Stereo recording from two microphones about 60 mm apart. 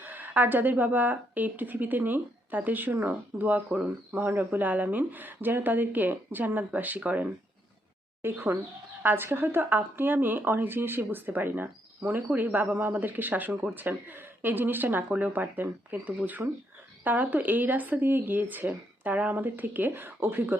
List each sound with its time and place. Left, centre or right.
0.0 s speech: right
8.2 s speech: right